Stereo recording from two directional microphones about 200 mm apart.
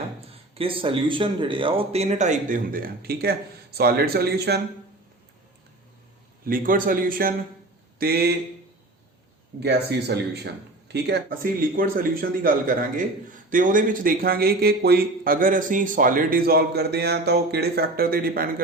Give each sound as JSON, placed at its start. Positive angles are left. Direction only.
{"t": 0.5, "sound": "speech", "side_deg": -25}
{"t": 6.4, "sound": "speech", "side_deg": -45}
{"t": 10.9, "sound": "speech", "side_deg": -55}